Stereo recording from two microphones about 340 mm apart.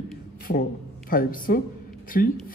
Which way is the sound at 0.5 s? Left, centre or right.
Left.